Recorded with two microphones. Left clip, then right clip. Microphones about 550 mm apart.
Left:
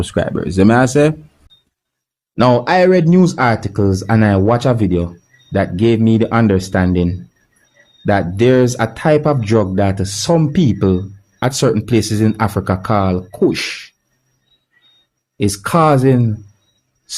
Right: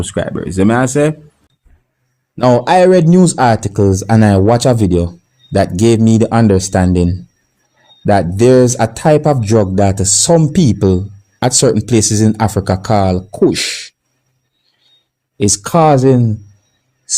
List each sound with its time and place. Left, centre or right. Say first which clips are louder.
0.0 s speech: even; left
2.3 s speech: right 2 dB; left
15.4 s speech: right 3 dB; left